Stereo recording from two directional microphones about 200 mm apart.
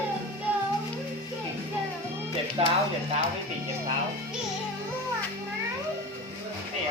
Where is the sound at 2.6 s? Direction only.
25° right (ahead or behind).